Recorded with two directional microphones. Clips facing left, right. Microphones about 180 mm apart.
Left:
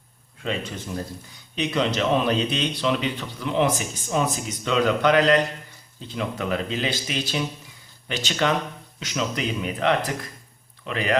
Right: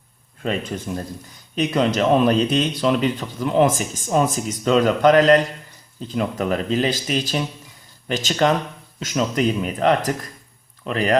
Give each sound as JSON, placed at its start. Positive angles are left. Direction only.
{"t": 1.5, "sound": "speech", "side_deg": -45}